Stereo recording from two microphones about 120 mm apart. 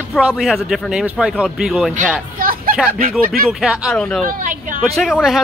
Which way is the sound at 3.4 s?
5° right (ahead or behind).